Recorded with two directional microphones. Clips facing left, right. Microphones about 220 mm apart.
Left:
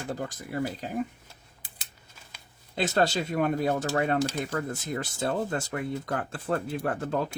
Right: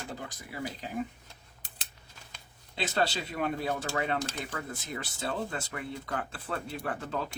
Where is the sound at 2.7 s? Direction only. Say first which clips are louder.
Left 5 dB; 45° left (ahead or behind).